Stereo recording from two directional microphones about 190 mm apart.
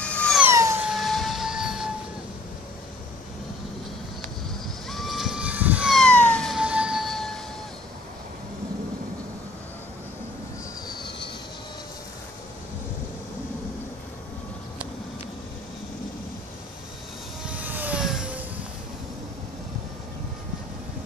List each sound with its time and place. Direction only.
0.0 s emergency vehicle: 5° left (ahead or behind)
0.4 s music: 15° right (ahead or behind)
4.8 s vehicle: centre (ahead or behind)
10.9 s train: 25° left (ahead or behind)
17.5 s a sound: 10° right (ahead or behind)